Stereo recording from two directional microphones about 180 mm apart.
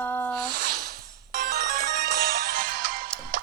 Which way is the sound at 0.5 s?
55° right (ahead or behind).